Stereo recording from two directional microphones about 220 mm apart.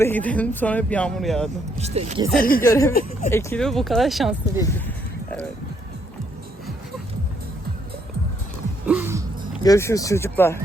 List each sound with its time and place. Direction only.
0.0 s speech: 10° left (ahead or behind)
1.7 s speech: 30° right (ahead or behind)
2.3 s speech: 40° left (ahead or behind)
2.6 s speech: 15° left (ahead or behind)
8.9 s music: 10° right (ahead or behind)
9.6 s speech: 15° left (ahead or behind)